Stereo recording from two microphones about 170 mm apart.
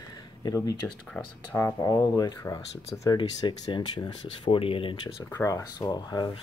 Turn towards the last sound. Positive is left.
turn(degrees=25)  # may be behind; listen again after turning